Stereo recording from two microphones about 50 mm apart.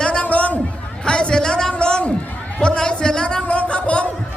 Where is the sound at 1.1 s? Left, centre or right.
Centre.